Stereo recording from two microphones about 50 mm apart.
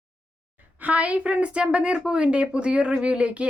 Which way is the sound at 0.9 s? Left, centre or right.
Right.